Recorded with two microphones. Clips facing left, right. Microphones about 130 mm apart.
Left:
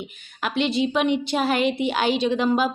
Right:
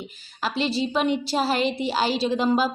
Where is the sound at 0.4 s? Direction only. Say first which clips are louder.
Left 2 dB; 35° right (ahead or behind).